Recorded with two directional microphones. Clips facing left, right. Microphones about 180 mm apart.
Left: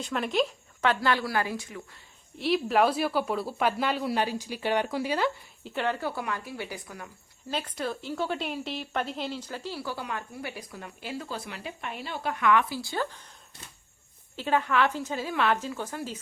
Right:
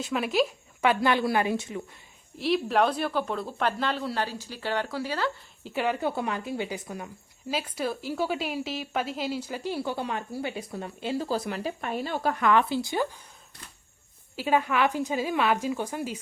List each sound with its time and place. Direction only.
0.0 s a woman's voice: 5° right (ahead or behind); by 1.8 s 25° right (ahead or behind)
2.4 s speech: centre (ahead or behind); by 5.3 s 15° left (ahead or behind)
5.6 s a woman's voice: 10° right (ahead or behind)
6.0 s a woman's voice: 20° right (ahead or behind)
7.5 s a woman's voice: 10° right (ahead or behind)
14.3 s a woman's voice: 10° right (ahead or behind)